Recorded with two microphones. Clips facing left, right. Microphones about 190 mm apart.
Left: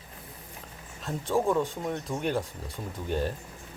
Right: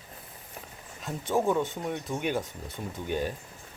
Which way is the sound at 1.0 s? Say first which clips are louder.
Even; centre (ahead or behind).